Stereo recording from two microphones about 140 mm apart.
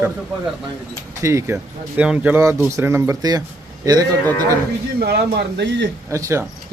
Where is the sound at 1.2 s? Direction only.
20° right (ahead or behind).